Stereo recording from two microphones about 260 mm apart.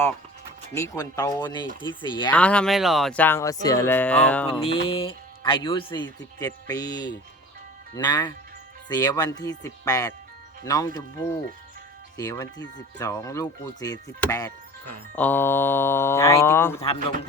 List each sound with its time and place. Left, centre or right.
0.7 s speech: centre
2.3 s speech: centre
4.9 s speech: centre